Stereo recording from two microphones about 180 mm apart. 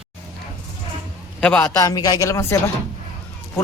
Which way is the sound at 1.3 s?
5° left (ahead or behind).